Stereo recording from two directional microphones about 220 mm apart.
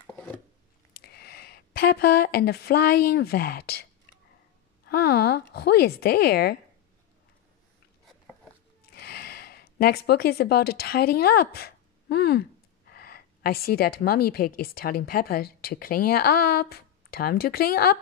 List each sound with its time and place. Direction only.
0.0 s a sound: 10° left (ahead or behind)
0.9 s speech: 45° left (ahead or behind)
4.8 s a woman's voice: 45° left (ahead or behind)
8.9 s a woman's voice: 45° left (ahead or behind)